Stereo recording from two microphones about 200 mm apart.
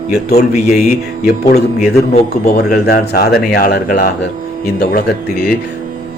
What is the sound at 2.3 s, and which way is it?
Speech, 50° left (ahead or behind).